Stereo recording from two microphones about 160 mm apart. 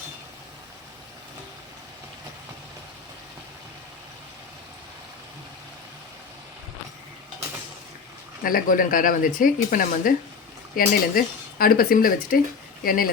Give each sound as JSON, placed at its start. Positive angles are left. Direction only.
{"t": 8.4, "sound": "speech", "side_deg": 60}